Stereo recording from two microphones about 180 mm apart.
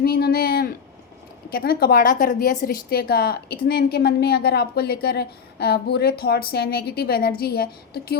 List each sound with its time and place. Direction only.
0.0 s a woman's voice: 60° left (ahead or behind)